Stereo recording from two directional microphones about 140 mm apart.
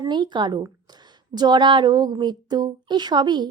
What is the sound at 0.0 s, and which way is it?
A woman's voice, 30° right (ahead or behind).